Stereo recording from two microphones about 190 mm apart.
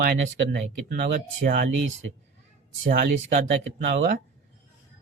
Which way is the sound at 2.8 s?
45° right (ahead or behind).